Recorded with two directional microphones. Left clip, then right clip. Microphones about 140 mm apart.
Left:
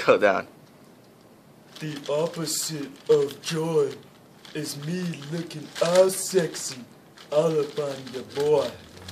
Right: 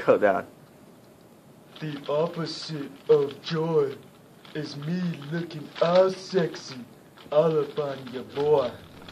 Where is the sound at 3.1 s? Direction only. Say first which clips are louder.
Even; 25° left (ahead or behind).